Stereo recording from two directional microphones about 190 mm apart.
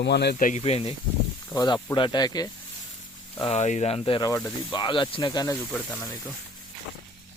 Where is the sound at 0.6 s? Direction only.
30° left (ahead or behind).